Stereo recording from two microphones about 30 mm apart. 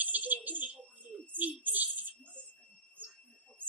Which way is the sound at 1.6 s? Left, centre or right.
Right.